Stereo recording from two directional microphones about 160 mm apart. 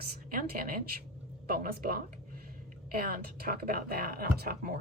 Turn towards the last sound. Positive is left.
turn(degrees=-70)  # may be behind; listen again after turning